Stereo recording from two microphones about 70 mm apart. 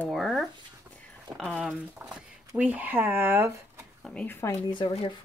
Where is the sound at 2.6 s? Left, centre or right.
Right.